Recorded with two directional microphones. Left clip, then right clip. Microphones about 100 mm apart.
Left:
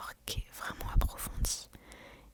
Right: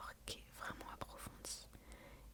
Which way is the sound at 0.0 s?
25° left (ahead or behind).